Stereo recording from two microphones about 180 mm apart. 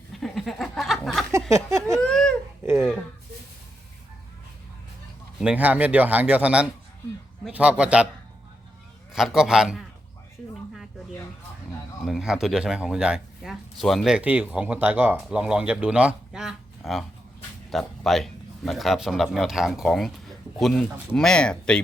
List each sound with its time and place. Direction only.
0.1 s goat: centre (ahead or behind)
1.5 s a sound: 15° right (ahead or behind)
2.0 s a sound: 5° left (ahead or behind)
5.4 s speech: 5° right (ahead or behind)
9.1 s speech: centre (ahead or behind)
12.0 s speech: centre (ahead or behind)